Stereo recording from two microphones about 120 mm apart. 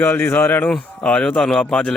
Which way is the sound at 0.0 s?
20° left (ahead or behind).